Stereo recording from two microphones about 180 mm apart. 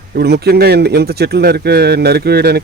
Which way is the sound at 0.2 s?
60° right (ahead or behind).